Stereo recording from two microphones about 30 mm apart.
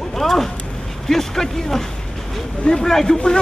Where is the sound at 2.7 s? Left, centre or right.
Left.